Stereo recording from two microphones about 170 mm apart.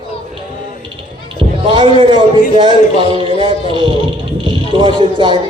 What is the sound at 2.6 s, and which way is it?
A man's voice, 25° right (ahead or behind).